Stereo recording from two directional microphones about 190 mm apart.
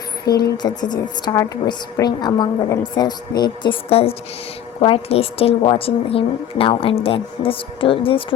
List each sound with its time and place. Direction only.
0.3 s speech: 55° left (ahead or behind)
0.8 s speech: 20° left (ahead or behind)